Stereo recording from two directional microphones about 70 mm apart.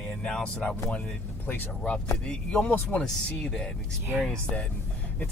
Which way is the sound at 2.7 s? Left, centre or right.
Left.